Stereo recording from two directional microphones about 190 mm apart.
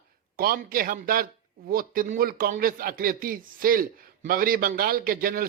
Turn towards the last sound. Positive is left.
turn(degrees=-50)  # may be behind; listen again after turning